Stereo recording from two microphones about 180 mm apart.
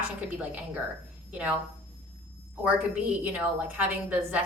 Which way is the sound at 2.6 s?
10° right (ahead or behind).